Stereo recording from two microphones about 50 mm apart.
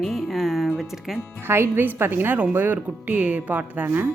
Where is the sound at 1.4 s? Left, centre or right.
Right.